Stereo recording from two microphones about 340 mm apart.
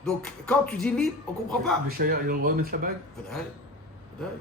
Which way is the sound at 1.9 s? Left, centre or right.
Right.